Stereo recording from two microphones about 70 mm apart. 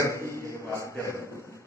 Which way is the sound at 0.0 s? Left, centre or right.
Left.